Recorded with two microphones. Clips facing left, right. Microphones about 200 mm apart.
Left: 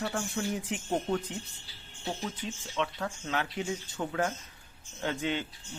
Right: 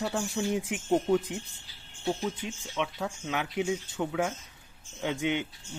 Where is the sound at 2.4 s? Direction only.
10° right (ahead or behind).